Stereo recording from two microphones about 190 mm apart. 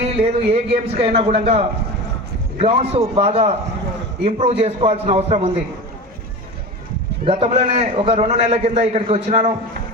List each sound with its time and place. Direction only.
0.0 s a man's voice: 30° right (ahead or behind)
7.3 s a man's voice: 30° right (ahead or behind)